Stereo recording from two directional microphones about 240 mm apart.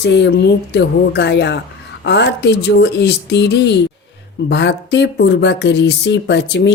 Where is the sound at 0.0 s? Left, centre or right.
Left.